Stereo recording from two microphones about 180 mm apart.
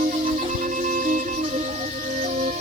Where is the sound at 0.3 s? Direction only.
45° right (ahead or behind).